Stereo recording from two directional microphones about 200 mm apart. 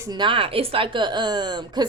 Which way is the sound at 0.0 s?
20° right (ahead or behind).